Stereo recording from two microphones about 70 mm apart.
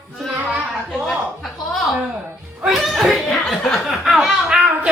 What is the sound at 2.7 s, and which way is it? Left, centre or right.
Chuckle, centre.